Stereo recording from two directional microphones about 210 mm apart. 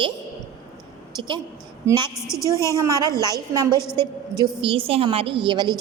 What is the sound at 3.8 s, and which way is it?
Speech, 15° left (ahead or behind).